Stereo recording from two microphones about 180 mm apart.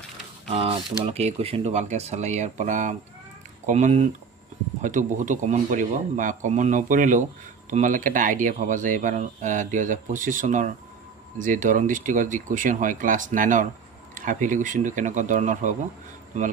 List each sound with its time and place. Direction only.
0.5 s speech: 30° right (ahead or behind)